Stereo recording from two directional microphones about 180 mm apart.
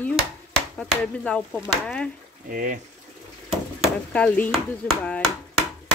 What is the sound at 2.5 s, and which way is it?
Speech, 50° right (ahead or behind).